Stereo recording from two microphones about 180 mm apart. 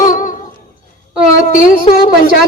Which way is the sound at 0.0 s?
45° left (ahead or behind).